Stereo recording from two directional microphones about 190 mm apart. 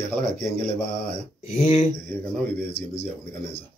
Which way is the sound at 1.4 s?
45° left (ahead or behind).